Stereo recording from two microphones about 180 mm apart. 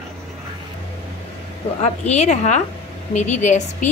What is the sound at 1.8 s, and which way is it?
A woman's voice, 40° left (ahead or behind).